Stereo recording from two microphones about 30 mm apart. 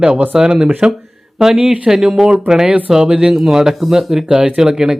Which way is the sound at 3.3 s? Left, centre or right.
Centre.